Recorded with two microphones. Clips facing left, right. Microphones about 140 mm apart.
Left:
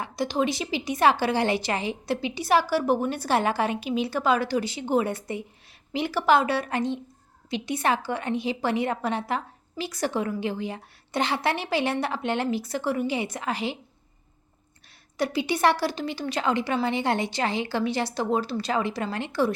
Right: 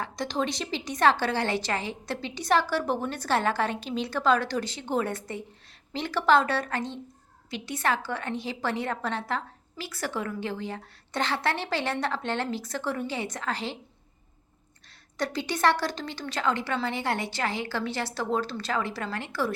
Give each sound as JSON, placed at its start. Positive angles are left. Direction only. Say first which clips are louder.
{"t": 0.0, "sound": "a woman's voice", "louder": "left 4 dB", "side_deg": 5}
{"t": 15.2, "sound": "a woman's voice", "louder": "left 3 dB", "side_deg": 10}